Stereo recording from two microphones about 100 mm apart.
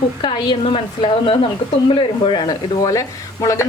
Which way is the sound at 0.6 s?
60° left (ahead or behind).